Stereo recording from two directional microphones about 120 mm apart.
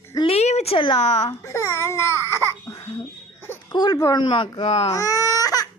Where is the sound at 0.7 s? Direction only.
45° left (ahead or behind).